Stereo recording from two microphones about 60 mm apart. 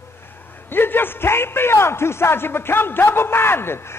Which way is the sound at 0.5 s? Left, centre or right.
Left.